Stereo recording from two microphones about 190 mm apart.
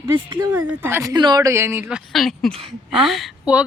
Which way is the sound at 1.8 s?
Centre (ahead or behind).